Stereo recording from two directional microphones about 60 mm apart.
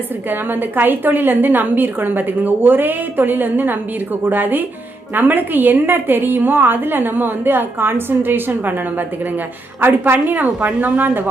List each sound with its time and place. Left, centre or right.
0.3 s a woman's voice: right